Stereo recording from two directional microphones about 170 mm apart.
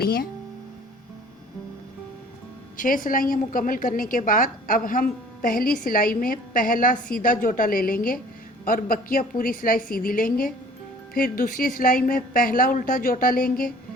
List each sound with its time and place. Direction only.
0.0 s a woman's voice: 60° left (ahead or behind)
2.7 s a woman's voice: 55° left (ahead or behind)